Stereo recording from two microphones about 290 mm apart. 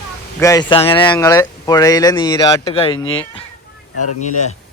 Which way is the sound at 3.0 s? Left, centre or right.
Left.